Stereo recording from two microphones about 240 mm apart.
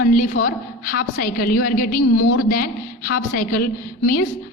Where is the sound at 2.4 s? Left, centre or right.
Left.